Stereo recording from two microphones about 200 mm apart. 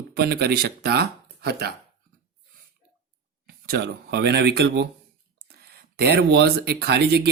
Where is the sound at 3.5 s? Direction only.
55° right (ahead or behind).